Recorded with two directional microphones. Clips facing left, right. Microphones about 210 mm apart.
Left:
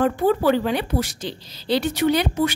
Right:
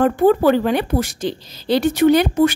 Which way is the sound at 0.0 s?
50° right (ahead or behind).